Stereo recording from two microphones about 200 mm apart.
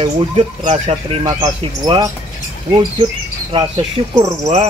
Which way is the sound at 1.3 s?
20° right (ahead or behind).